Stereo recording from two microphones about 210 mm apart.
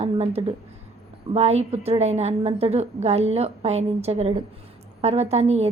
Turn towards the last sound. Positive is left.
turn(degrees=-30)  # may be behind; listen again after turning